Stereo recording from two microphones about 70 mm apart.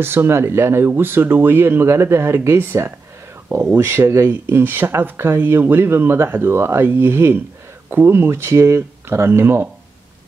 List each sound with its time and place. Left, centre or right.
0.0 s speech: right